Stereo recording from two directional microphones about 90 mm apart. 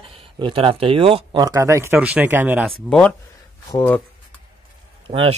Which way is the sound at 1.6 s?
35° right (ahead or behind).